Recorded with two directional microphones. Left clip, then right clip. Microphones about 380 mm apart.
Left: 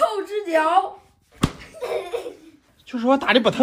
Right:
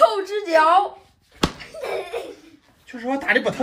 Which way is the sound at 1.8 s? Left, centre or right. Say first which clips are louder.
Left 1 dB; centre.